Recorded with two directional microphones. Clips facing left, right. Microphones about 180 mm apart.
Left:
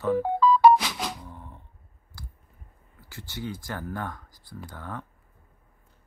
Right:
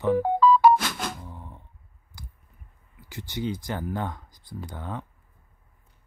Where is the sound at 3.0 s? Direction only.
15° right (ahead or behind).